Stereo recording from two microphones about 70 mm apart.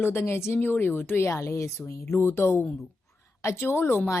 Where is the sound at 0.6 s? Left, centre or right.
Left.